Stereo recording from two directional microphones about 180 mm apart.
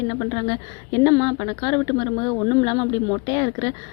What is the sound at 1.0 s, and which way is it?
A woman's voice, 20° left (ahead or behind).